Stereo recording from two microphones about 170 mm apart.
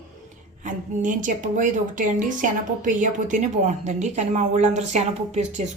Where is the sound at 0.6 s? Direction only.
50° right (ahead or behind).